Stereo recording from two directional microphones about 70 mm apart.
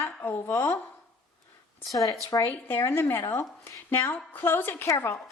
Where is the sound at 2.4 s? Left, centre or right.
Left.